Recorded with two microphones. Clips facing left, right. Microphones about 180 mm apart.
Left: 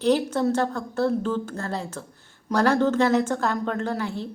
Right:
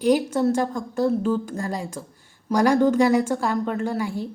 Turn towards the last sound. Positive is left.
turn(degrees=-10)  # may be behind; listen again after turning